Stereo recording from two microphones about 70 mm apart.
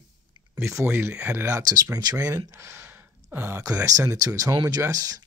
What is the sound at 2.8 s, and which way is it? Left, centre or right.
Gasp, right.